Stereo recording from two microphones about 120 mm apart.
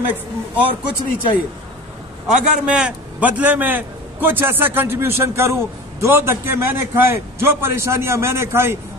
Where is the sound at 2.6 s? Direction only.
10° right (ahead or behind).